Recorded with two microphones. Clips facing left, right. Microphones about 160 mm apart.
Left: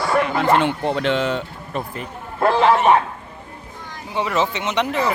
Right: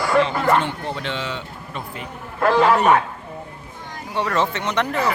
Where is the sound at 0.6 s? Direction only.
65° left (ahead or behind); by 2.0 s 45° left (ahead or behind).